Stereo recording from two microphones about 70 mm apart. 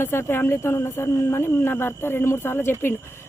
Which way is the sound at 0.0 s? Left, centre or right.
Left.